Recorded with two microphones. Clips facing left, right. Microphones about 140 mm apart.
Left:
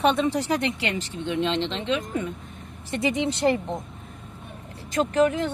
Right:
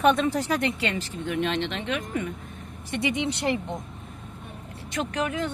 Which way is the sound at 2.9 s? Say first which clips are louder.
Left 2 dB; 40° left (ahead or behind).